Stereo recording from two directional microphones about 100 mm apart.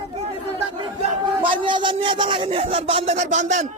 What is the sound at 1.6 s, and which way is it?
Speech, 55° right (ahead or behind).